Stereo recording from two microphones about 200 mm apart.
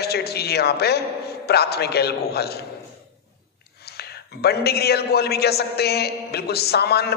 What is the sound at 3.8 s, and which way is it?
A man's voice, 55° left (ahead or behind).